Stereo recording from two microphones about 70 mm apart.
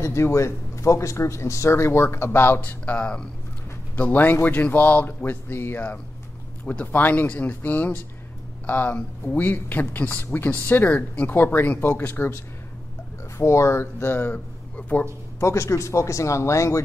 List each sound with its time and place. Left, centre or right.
0.0 s speech: left
2.8 s speech: centre
3.9 s speech: left
13.4 s speech: left
14.3 s a man's voice: left
15.4 s speech: left